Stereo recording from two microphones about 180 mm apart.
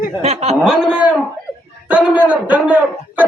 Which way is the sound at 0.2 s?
35° right (ahead or behind).